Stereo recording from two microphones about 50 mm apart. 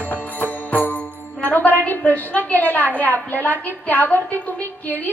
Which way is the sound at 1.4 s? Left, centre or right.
Left.